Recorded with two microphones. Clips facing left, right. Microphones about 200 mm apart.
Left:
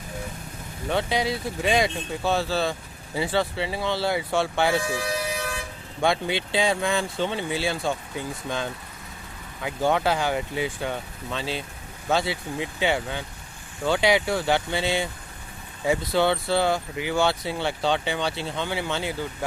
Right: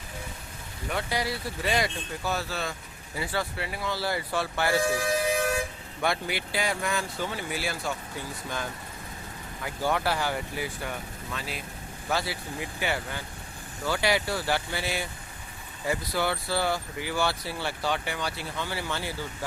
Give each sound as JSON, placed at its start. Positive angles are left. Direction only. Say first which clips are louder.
{"t": 0.9, "sound": "speech", "louder": "left 5 dB", "side_deg": 25}
{"t": 5.0, "sound": "vehicle", "louder": "right 3 dB", "side_deg": -50}
{"t": 6.0, "sound": "speech", "louder": "left 5 dB", "side_deg": 25}